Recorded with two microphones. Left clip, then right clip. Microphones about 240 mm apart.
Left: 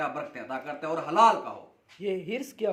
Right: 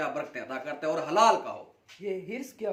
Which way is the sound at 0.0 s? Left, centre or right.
Centre.